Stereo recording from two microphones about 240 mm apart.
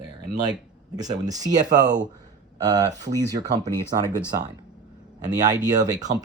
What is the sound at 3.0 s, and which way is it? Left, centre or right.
Speech, centre.